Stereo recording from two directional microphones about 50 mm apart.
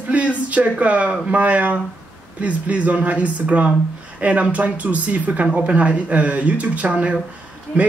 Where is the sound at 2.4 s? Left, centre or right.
Right.